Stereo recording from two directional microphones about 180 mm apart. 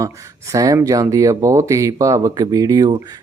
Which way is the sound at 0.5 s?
20° right (ahead or behind).